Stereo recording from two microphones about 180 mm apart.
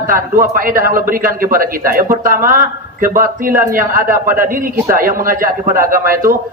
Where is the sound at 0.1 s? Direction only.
50° right (ahead or behind).